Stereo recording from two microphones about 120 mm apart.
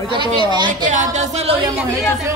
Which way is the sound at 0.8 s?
85° right.